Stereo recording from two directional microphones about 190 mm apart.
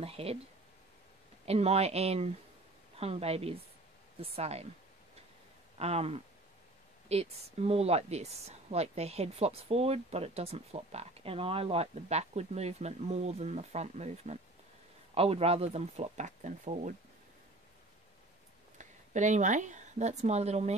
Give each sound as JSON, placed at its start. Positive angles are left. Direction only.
{"t": 0.0, "sound": "speech", "side_deg": -30}
{"t": 1.4, "sound": "speech", "side_deg": -35}
{"t": 5.8, "sound": "speech", "side_deg": -35}
{"t": 18.8, "sound": "speech", "side_deg": -40}